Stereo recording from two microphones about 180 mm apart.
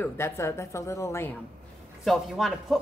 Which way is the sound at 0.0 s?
15° left (ahead or behind).